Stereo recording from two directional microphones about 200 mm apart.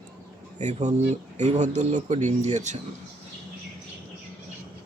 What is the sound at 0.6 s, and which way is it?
Speech, 35° right (ahead or behind).